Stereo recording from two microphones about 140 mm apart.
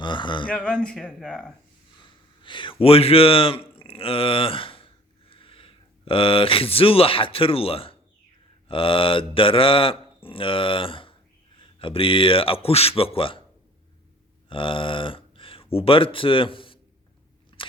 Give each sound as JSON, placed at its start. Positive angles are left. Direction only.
{"t": 0.0, "sound": "speech", "side_deg": 35}
{"t": 0.4, "sound": "speech", "side_deg": 10}
{"t": 2.4, "sound": "speech", "side_deg": 35}
{"t": 14.5, "sound": "speech", "side_deg": 40}